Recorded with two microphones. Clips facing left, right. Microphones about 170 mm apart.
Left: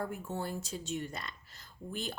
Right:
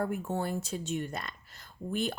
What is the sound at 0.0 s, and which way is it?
Speech, 55° right (ahead or behind).